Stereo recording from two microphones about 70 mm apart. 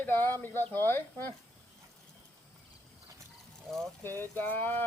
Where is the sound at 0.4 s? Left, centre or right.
Left.